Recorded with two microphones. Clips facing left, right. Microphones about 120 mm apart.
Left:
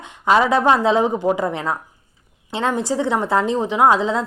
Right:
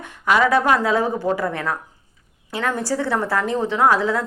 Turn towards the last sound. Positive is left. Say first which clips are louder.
# left 2 dB
turn(degrees=20)  # may be behind; listen again after turning